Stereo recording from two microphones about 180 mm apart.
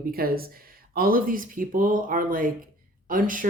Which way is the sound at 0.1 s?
55° right (ahead or behind).